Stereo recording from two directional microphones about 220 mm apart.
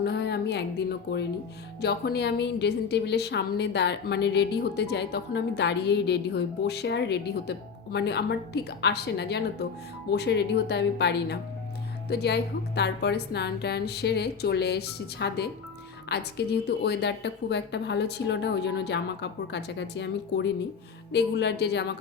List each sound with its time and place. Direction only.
0.0 s a woman's voice: 50° left (ahead or behind)